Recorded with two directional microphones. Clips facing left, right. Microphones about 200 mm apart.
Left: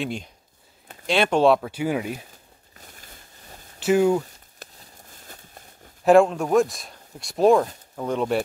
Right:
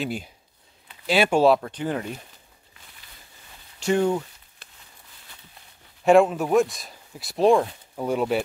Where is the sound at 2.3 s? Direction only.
45° left (ahead or behind).